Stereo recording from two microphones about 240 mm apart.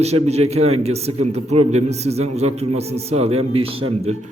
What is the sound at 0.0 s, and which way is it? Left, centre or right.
A man's voice, right.